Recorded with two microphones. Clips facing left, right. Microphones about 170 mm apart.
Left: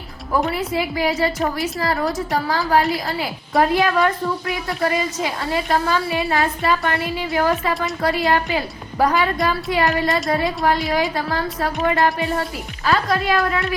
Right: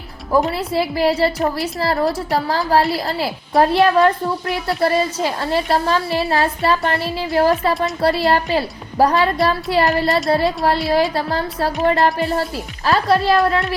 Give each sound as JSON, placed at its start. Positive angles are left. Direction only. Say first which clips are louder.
{"t": 0.5, "sound": "a woman's voice", "louder": "right 2 dB", "side_deg": -35}